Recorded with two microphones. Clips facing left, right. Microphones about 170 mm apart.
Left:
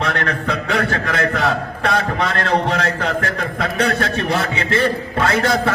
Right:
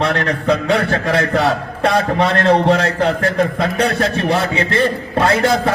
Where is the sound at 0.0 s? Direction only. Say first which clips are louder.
Right 4 dB; 30° right (ahead or behind).